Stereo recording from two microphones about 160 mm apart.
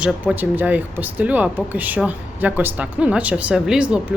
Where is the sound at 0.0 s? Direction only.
10° right (ahead or behind).